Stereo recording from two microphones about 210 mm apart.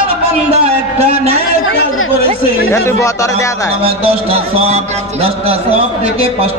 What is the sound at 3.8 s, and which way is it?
Music, 30° right (ahead or behind).